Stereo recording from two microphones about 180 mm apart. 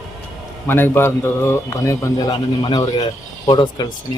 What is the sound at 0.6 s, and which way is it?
A man's voice, 10° left (ahead or behind).